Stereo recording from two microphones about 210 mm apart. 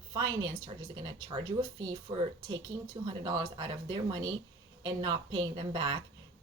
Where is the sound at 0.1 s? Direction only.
20° right (ahead or behind).